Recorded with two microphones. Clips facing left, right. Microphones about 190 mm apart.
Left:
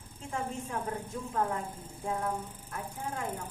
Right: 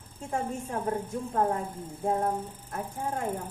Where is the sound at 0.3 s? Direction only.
45° right (ahead or behind).